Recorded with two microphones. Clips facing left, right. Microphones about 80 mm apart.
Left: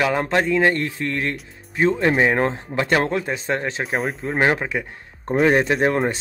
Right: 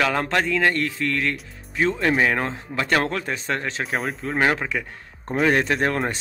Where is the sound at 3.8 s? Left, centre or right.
Centre.